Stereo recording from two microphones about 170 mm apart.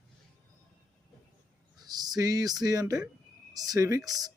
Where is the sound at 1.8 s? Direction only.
25° right (ahead or behind).